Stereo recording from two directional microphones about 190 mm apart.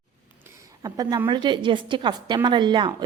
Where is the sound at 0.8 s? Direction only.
20° right (ahead or behind).